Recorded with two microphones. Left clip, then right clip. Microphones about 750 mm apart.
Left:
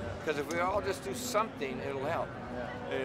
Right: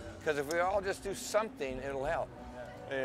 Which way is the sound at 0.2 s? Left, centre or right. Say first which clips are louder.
Right 1 dB; right.